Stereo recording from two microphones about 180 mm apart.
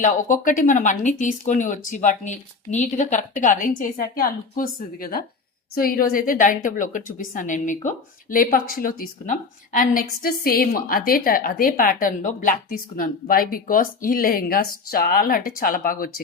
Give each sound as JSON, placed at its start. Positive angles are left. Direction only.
{"t": 0.0, "sound": "speech", "side_deg": 45}